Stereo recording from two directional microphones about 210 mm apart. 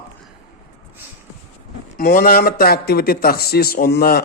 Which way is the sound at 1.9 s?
45° left (ahead or behind).